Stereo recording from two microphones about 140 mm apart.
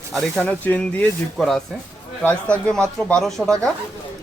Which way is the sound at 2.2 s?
10° left (ahead or behind).